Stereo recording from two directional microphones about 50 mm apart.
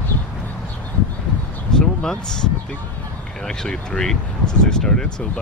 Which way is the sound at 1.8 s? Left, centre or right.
Centre.